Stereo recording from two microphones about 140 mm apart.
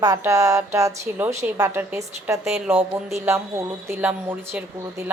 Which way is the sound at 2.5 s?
5° right (ahead or behind).